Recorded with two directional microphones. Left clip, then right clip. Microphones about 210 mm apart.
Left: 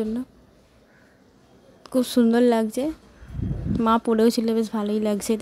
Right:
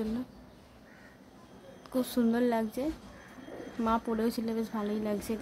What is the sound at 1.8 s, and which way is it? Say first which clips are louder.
A woman's voice: left 10 dB; 35° left (ahead or behind).